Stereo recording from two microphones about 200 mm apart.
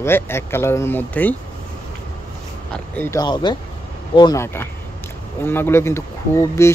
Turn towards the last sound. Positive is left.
turn(degrees=15)  # may be behind; listen again after turning